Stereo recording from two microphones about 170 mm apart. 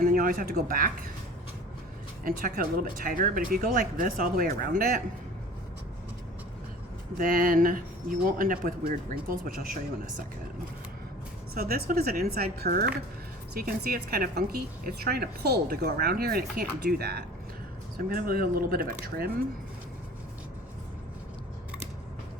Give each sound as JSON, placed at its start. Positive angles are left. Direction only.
{"t": 0.0, "sound": "speech", "side_deg": -55}
{"t": 2.2, "sound": "speech", "side_deg": -55}
{"t": 7.2, "sound": "speech", "side_deg": -55}
{"t": 11.5, "sound": "speech", "side_deg": -60}